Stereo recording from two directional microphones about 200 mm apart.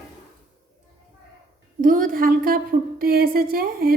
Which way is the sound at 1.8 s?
40° right (ahead or behind).